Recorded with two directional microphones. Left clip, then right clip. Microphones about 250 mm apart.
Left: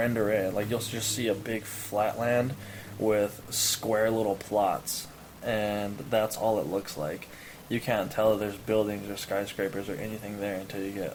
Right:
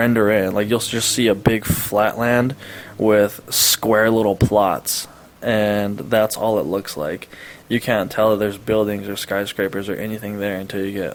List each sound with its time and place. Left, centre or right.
0.0 s speech: right